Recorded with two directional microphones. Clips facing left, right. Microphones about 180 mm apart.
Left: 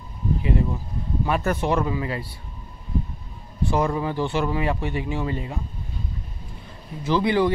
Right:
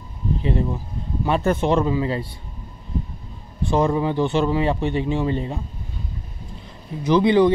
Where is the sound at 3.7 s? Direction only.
20° right (ahead or behind).